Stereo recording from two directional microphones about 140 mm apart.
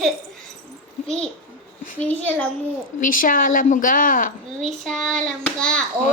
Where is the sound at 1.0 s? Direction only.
5° left (ahead or behind).